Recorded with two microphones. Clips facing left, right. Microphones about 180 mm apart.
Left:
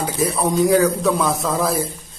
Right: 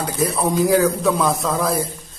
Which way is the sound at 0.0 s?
Centre (ahead or behind).